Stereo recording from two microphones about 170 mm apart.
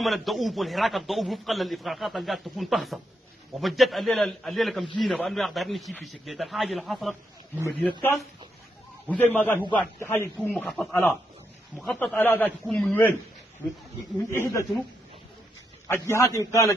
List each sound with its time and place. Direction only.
0.0 s a man's voice: centre (ahead or behind)
9.0 s a man's voice: 10° left (ahead or behind)
10.5 s a man's voice: 5° left (ahead or behind)
14.1 s a man's voice: 15° left (ahead or behind)
15.9 s a man's voice: 15° left (ahead or behind)